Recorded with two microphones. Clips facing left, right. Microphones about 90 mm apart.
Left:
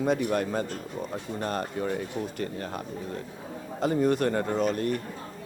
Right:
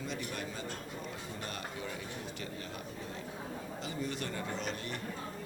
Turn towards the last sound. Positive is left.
turn(degrees=50)  # may be behind; listen again after turning